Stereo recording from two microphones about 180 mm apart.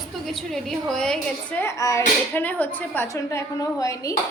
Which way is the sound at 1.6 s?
15° left (ahead or behind).